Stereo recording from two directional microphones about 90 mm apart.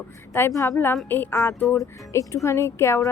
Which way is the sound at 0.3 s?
30° left (ahead or behind).